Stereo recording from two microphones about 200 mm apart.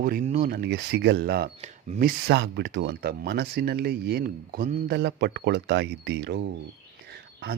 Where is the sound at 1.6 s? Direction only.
35° right (ahead or behind).